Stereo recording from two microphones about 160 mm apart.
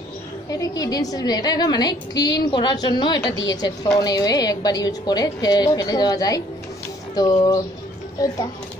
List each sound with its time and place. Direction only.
0.5 s a woman's voice: 25° left (ahead or behind)